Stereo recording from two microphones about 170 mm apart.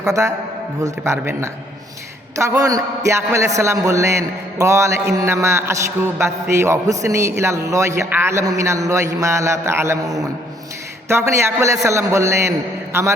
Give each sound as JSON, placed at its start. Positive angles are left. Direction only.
{"t": 0.1, "sound": "a man's voice", "side_deg": -20}